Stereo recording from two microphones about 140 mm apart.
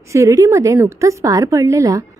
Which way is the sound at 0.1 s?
25° right (ahead or behind).